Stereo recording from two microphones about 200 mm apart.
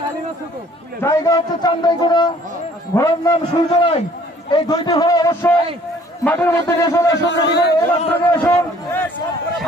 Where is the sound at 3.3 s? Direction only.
25° left (ahead or behind).